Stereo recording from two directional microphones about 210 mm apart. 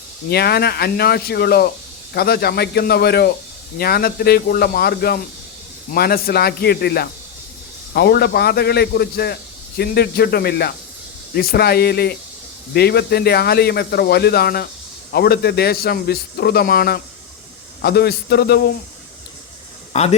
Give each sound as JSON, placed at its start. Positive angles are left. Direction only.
{"t": 0.3, "sound": "a man's voice", "side_deg": 50}
{"t": 19.9, "sound": "speech", "side_deg": 30}